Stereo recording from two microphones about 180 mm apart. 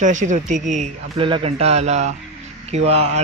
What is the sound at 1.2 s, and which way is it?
Speech, 30° right (ahead or behind).